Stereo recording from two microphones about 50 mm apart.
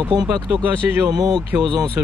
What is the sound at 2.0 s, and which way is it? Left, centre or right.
Speech, right.